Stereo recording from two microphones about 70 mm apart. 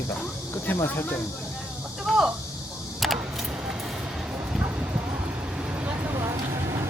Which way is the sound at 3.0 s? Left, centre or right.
Centre.